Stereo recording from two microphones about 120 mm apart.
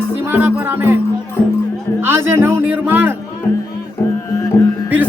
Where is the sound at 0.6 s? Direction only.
20° right (ahead or behind).